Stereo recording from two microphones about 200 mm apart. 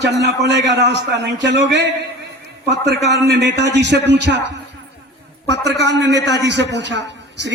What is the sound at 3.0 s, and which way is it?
A man's voice, 55° right (ahead or behind).